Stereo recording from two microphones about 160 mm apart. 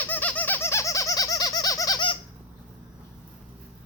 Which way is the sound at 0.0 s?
10° left (ahead or behind).